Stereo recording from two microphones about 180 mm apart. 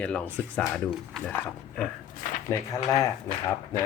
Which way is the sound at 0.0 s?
5° left (ahead or behind).